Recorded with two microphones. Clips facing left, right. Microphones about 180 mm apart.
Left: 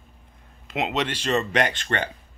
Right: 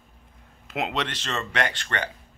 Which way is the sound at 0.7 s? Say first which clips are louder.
Left 3 dB; centre (ahead or behind).